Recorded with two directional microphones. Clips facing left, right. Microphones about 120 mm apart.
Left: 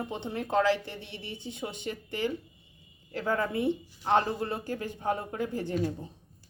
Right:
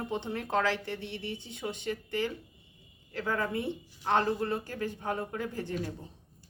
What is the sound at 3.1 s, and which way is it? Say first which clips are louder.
Speech: left 2 dB; 30° left (ahead or behind).